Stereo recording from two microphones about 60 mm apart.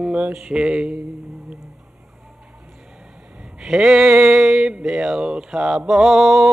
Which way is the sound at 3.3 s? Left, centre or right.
Centre.